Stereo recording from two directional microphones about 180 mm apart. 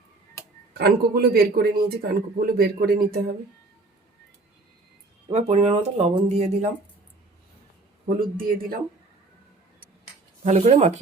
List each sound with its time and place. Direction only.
0.7 s a man's voice: 60° right (ahead or behind)
5.3 s speech: 35° right (ahead or behind)
8.2 s speech: 55° right (ahead or behind)
10.4 s speech: 40° right (ahead or behind)